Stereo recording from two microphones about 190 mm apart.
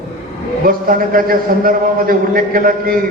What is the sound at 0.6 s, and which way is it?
A man's voice, 50° right (ahead or behind).